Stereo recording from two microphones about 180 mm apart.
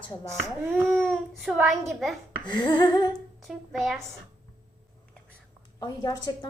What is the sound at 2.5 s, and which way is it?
Speech, 25° left (ahead or behind).